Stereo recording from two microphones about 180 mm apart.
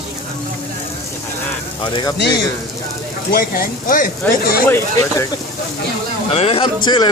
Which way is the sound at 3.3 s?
55° left (ahead or behind).